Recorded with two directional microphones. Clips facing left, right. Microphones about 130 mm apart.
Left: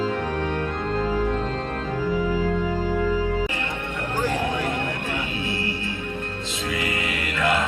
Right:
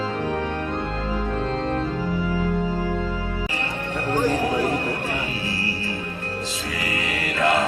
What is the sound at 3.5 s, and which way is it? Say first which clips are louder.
Music: right 2 dB; 35° right (ahead or behind).